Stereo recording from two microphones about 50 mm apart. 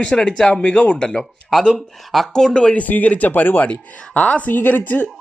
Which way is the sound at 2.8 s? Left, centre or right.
Left.